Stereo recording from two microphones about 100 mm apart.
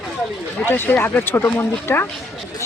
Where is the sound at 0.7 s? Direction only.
20° left (ahead or behind).